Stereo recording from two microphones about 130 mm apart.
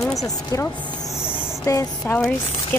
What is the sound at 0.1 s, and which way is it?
Speech, 25° left (ahead or behind).